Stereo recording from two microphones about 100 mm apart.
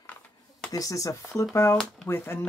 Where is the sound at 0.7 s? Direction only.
35° left (ahead or behind).